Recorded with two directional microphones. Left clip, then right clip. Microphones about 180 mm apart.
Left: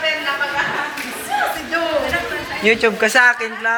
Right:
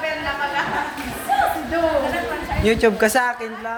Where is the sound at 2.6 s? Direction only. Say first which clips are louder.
Left 2 dB; 20° right (ahead or behind).